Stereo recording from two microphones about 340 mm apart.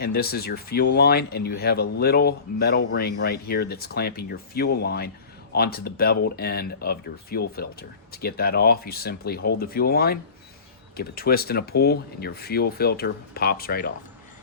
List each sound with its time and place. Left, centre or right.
0.0 s speech: left